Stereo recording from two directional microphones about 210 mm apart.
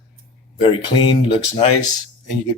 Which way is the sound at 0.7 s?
25° left (ahead or behind).